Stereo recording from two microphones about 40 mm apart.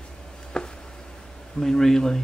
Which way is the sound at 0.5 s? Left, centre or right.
Centre.